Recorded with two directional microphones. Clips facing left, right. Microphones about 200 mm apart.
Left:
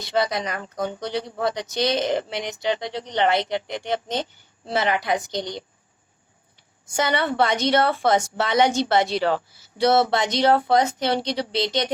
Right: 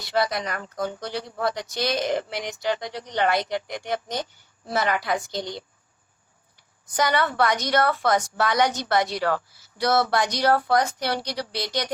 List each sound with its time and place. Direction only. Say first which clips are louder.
0.0 s speech: left 1 dB; 20° left (ahead or behind)
6.9 s speech: left 1 dB; 25° left (ahead or behind)